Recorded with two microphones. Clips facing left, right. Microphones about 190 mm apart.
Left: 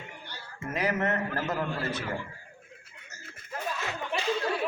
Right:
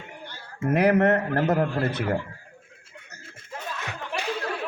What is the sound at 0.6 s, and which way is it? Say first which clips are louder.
A man's voice: right 10 dB; 60° right (ahead or behind).